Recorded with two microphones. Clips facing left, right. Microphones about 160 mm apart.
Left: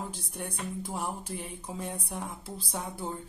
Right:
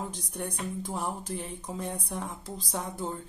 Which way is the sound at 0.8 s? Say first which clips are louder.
Right 2 dB; 10° left (ahead or behind).